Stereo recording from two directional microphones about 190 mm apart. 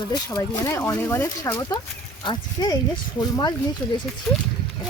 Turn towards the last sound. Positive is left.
turn(degrees=0)  # may be behind; listen again after turning